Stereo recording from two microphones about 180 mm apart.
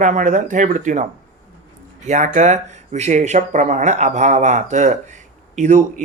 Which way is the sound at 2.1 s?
40° right (ahead or behind).